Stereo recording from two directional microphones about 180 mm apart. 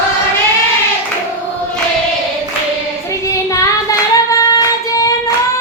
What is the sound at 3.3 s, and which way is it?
Child singing, 20° left (ahead or behind).